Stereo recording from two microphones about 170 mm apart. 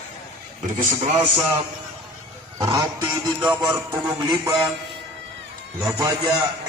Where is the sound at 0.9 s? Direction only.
45° right (ahead or behind).